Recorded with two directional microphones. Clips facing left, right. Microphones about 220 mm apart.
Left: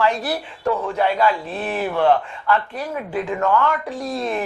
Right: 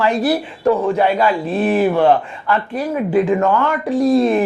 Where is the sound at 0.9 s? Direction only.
10° right (ahead or behind).